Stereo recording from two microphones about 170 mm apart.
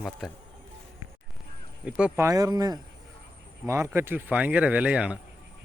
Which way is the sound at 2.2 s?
20° right (ahead or behind).